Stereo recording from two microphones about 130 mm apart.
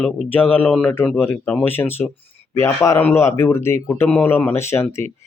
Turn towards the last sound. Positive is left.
turn(degrees=20)  # may be behind; listen again after turning